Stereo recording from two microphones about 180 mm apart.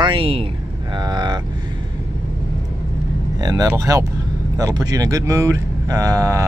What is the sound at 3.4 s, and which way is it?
Speech, 20° right (ahead or behind).